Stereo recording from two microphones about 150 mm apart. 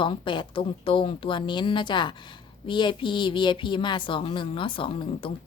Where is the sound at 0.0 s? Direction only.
35° left (ahead or behind).